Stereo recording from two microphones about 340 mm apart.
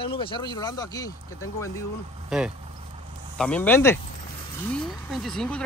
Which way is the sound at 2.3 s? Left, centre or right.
Centre.